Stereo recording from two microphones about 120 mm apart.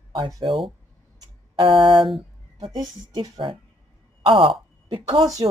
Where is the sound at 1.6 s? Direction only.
45° right (ahead or behind).